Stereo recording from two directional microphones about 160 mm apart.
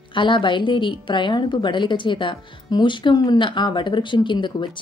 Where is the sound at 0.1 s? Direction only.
30° left (ahead or behind).